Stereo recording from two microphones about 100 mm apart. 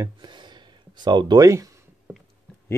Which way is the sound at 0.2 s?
50° right (ahead or behind).